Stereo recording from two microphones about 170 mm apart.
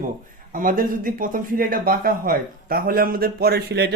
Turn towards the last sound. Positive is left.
turn(degrees=-70)  # may be behind; listen again after turning